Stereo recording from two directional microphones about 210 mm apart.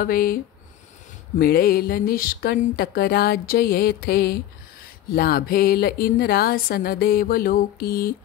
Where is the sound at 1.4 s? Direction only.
45° left (ahead or behind).